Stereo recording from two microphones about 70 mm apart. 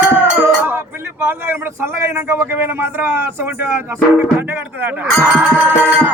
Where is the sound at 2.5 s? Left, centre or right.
Right.